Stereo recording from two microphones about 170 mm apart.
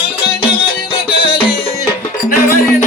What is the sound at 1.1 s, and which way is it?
Music, 30° left (ahead or behind).